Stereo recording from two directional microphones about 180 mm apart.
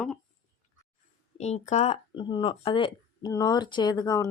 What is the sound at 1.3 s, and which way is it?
Speech, 40° left (ahead or behind).